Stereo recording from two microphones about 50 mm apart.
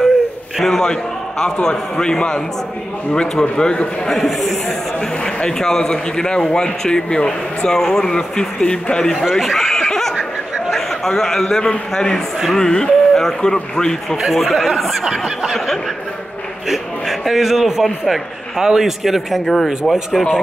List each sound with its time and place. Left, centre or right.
0.7 s a man's voice: centre
4.1 s a man's voice: centre
5.2 s a man's voice: centre
9.3 s snicker: centre
10.7 s a sound: centre
11.5 s a man's voice: centre
14.1 s a man's voice: centre
15.0 s a man's voice: centre
15.5 s a man's voice: centre
19.4 s a man's voice: centre